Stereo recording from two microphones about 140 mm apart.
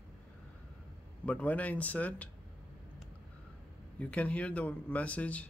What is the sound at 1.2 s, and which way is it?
Speech, 10° left (ahead or behind).